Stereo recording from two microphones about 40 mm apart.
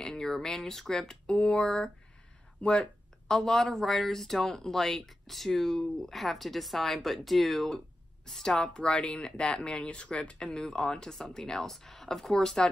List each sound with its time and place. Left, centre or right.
0.0 s speech: centre
3.3 s speech: centre
8.5 s speech: left